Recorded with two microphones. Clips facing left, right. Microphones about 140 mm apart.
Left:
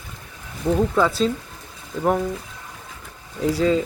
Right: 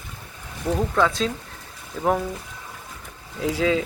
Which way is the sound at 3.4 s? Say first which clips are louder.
Left 3 dB; centre (ahead or behind).